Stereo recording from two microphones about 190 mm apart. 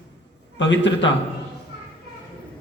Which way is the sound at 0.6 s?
75° left (ahead or behind).